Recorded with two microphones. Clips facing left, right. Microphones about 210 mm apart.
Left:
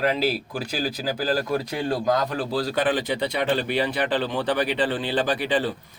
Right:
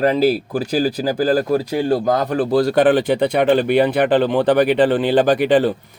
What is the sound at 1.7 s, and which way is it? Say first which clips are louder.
Speech: right 8 dB; 30° right (ahead or behind).